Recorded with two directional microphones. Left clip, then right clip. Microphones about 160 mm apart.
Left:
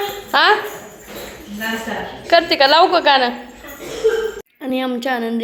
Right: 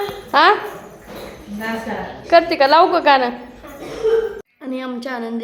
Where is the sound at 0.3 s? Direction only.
20° right (ahead or behind).